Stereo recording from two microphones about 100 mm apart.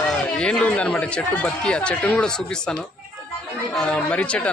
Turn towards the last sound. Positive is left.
turn(degrees=10)  # may be behind; listen again after turning